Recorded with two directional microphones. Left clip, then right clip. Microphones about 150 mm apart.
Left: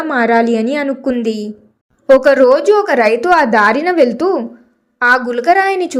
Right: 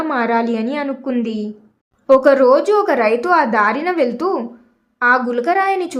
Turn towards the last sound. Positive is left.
turn(degrees=20)  # may be behind; listen again after turning